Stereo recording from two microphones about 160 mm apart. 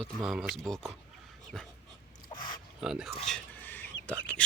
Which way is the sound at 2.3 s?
30° left (ahead or behind).